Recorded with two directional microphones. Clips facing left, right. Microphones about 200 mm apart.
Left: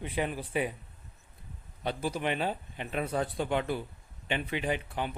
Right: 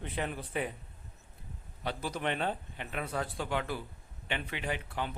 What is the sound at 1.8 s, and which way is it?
Speech, 20° left (ahead or behind).